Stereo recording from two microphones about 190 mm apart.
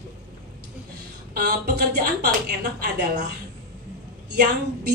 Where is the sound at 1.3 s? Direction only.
55° right (ahead or behind).